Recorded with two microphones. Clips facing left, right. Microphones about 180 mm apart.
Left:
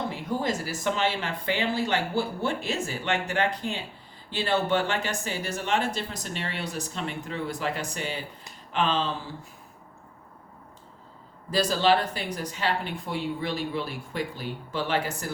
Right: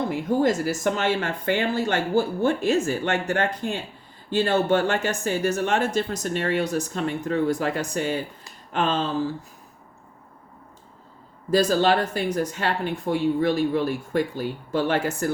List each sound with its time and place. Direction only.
0.3 s speech: 50° right (ahead or behind)
11.5 s speech: 50° right (ahead or behind)